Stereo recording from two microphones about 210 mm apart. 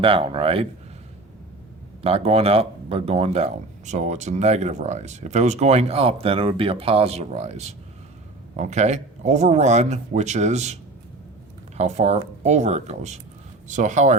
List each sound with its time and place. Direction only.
0.0 s speech: 25° right (ahead or behind)
2.0 s speech: 30° right (ahead or behind)
11.8 s speech: 30° right (ahead or behind)